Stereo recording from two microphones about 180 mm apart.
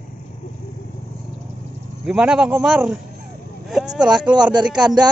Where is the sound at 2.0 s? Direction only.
5° right (ahead or behind).